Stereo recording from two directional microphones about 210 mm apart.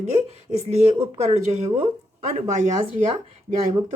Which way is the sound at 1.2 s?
30° right (ahead or behind).